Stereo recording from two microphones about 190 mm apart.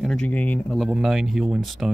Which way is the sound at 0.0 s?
5° left (ahead or behind).